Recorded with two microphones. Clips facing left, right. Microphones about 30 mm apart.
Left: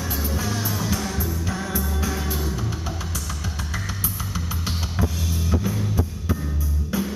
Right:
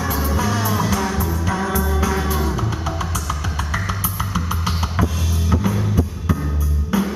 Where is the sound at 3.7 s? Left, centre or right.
Right.